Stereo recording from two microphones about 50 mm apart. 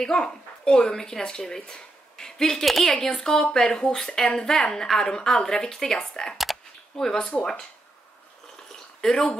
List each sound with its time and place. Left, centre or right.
0.0 s speech: centre
2.6 s speech: centre
2.9 s speech: centre
6.3 s a sound: centre
7.1 s speech: centre
9.1 s speech: centre